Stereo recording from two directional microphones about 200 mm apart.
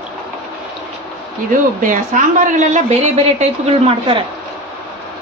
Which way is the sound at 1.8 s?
40° right (ahead or behind).